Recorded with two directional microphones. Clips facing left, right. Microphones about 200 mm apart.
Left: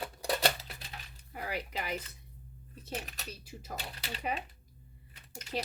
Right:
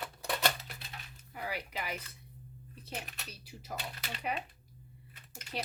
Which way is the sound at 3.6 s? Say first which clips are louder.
Right 1 dB; 35° left (ahead or behind).